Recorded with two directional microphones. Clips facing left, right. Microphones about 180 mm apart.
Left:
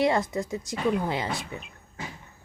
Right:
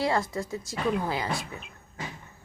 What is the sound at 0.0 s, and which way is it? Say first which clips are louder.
Speech: left 3 dB; 20° left (ahead or behind).